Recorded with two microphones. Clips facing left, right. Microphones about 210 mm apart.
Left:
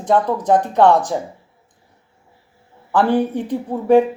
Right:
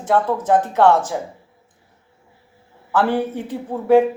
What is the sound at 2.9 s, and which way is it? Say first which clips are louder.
Speech: left 3 dB; 15° left (ahead or behind).